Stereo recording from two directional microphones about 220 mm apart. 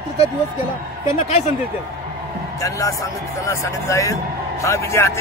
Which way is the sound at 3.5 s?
15° left (ahead or behind).